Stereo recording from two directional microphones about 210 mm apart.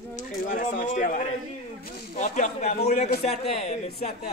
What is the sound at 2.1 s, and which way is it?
Speech, 30° left (ahead or behind).